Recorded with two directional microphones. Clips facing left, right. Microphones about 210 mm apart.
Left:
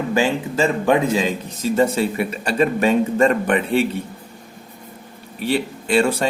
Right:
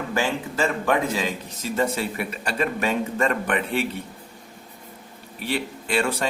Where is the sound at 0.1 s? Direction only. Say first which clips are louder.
Left 5 dB; 20° left (ahead or behind).